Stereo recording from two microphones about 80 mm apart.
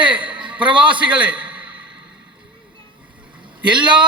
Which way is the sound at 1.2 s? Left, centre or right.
Centre.